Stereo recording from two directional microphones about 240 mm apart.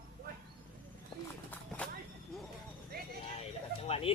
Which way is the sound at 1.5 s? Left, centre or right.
Centre.